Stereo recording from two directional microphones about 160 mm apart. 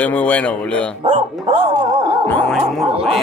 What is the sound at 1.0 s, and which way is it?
Speech, 45° right (ahead or behind).